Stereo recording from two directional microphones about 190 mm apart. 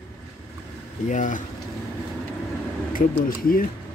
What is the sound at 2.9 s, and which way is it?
Speech, 50° left (ahead or behind).